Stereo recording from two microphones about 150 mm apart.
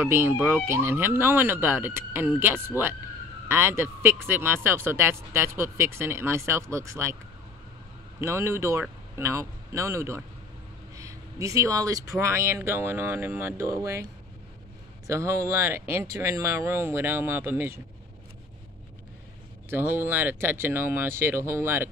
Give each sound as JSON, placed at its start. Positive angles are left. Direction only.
{"t": 0.0, "sound": "speech", "side_deg": -15}
{"t": 8.2, "sound": "speech", "side_deg": -20}
{"t": 15.0, "sound": "speech", "side_deg": -20}
{"t": 19.7, "sound": "speech", "side_deg": -15}